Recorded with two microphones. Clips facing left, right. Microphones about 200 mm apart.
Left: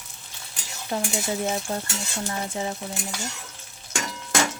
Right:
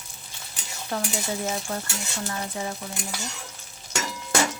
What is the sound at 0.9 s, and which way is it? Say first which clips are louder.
Speech: left 2 dB; 20° left (ahead or behind).